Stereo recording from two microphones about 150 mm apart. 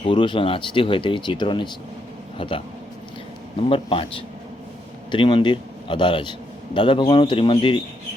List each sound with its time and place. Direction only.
0.0 s speech: 35° left (ahead or behind)
3.7 s speech: 35° left (ahead or behind)